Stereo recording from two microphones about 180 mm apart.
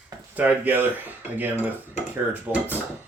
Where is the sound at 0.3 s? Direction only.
10° right (ahead or behind).